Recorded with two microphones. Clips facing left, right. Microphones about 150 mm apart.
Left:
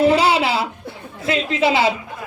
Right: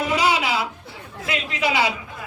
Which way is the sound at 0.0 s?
30° left (ahead or behind).